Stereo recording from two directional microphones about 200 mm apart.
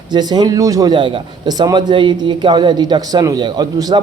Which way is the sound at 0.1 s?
20° right (ahead or behind).